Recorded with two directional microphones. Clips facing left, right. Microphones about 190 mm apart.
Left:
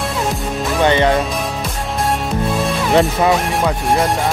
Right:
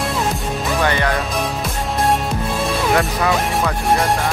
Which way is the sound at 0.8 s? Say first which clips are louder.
Left 8 dB; 20° left (ahead or behind).